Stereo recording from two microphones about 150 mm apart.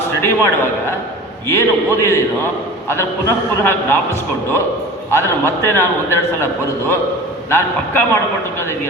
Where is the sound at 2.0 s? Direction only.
15° left (ahead or behind).